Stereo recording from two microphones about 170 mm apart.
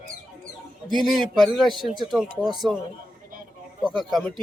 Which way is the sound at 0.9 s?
Centre (ahead or behind).